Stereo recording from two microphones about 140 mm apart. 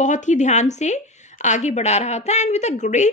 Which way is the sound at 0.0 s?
60° left (ahead or behind).